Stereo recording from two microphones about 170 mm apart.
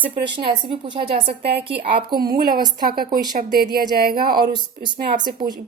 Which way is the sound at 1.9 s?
60° right (ahead or behind).